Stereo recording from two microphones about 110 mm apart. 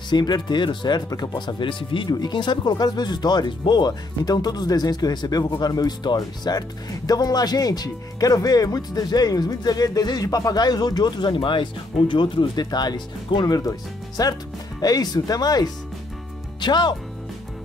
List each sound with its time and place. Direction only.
0.1 s speech: 40° left (ahead or behind)